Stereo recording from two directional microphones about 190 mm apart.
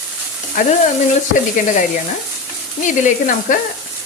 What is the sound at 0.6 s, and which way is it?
Frying, 45° left (ahead or behind).